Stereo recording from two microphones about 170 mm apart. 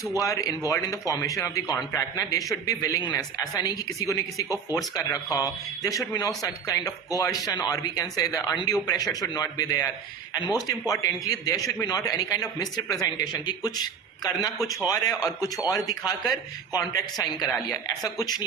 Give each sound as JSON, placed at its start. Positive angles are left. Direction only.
{"t": 0.2, "sound": "a man's voice", "side_deg": 20}